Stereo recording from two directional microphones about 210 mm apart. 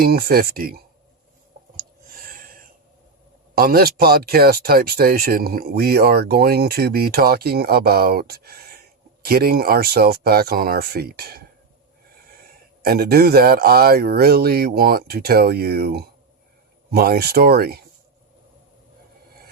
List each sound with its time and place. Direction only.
0.0 s speech: 45° right (ahead or behind)
1.7 s a sound: 45° right (ahead or behind)
3.6 s speech: 45° right (ahead or behind)
12.8 s speech: 45° right (ahead or behind)